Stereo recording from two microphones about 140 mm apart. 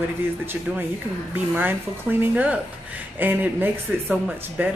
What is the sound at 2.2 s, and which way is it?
A woman's voice, 10° right (ahead or behind).